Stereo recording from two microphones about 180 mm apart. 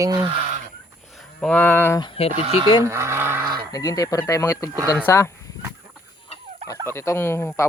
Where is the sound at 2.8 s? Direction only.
15° right (ahead or behind).